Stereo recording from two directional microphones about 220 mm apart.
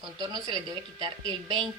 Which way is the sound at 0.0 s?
20° right (ahead or behind).